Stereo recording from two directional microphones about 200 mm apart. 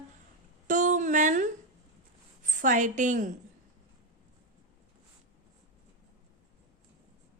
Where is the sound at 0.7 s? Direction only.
40° right (ahead or behind).